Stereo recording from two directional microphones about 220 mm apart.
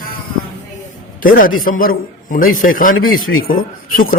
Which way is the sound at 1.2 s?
40° left (ahead or behind).